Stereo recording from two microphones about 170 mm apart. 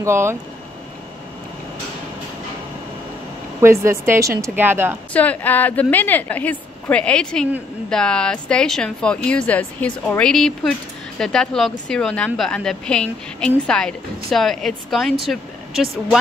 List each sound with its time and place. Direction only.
0.0 s speech: 15° right (ahead or behind)
3.6 s speech: 15° right (ahead or behind)
5.1 s a woman's voice: 10° left (ahead or behind)